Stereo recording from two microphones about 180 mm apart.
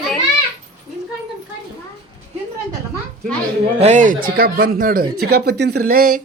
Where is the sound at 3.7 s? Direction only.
40° right (ahead or behind).